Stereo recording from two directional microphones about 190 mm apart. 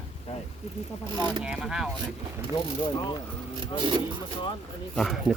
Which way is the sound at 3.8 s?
25° right (ahead or behind).